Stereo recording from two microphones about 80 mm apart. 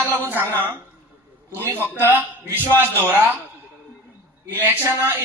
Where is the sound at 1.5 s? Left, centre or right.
Right.